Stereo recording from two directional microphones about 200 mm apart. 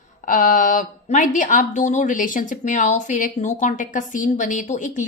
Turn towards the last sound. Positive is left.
turn(degrees=40)  # may be behind; listen again after turning